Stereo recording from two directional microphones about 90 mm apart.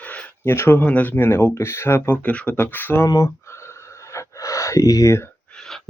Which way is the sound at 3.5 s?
30° left (ahead or behind).